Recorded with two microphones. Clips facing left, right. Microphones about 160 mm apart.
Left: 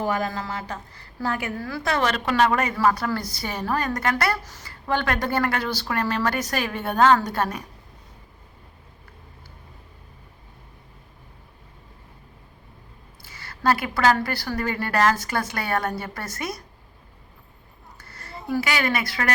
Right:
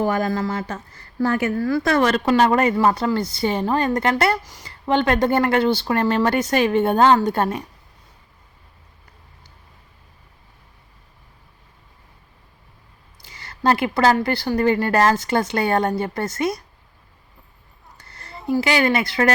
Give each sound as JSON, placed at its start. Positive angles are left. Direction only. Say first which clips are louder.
{"t": 0.1, "sound": "speech", "louder": "right 5 dB", "side_deg": -45}
{"t": 1.6, "sound": "a woman's voice", "louder": "right 5 dB", "side_deg": -45}
{"t": 13.2, "sound": "a woman's voice", "louder": "right 3 dB", "side_deg": -25}
{"t": 17.9, "sound": "a sound", "louder": "even", "side_deg": -20}
{"t": 18.4, "sound": "a woman's voice", "louder": "right 6 dB", "side_deg": -20}